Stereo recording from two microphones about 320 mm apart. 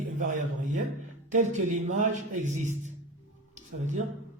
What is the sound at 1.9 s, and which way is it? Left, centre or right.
Speech, right.